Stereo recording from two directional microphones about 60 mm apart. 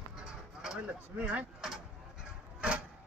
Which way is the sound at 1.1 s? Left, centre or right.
Right.